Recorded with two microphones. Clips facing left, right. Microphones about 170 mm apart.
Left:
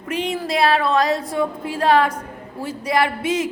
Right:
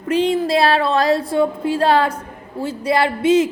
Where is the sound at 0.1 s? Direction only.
30° right (ahead or behind).